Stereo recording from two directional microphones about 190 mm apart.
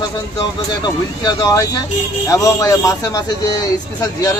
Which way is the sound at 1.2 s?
20° left (ahead or behind).